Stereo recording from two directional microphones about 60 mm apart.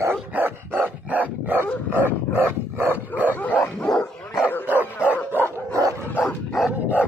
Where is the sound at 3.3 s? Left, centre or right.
Left.